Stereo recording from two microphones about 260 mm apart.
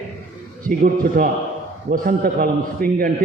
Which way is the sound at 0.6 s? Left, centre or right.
Right.